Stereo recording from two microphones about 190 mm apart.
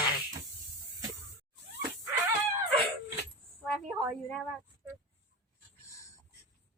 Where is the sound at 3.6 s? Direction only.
5° left (ahead or behind).